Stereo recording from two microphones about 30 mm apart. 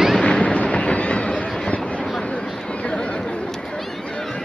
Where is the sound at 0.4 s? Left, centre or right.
Left.